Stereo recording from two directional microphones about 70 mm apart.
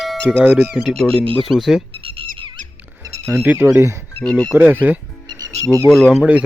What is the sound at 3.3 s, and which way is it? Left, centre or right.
Speech, right.